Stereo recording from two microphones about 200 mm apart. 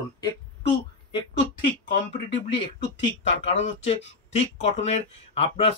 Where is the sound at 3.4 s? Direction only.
30° left (ahead or behind).